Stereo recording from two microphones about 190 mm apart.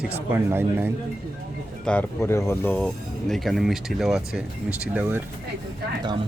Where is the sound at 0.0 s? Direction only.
10° right (ahead or behind).